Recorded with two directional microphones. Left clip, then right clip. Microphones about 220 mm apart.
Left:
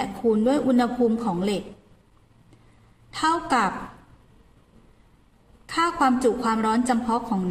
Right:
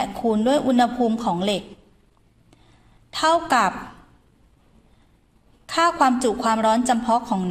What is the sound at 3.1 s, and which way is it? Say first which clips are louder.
Speech: right 4 dB; 25° right (ahead or behind).